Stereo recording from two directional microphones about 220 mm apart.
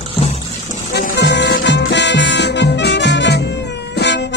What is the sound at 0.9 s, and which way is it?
Music, 50° left (ahead or behind).